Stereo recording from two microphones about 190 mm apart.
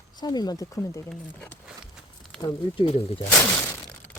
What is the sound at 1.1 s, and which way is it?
Speech, 5° left (ahead or behind).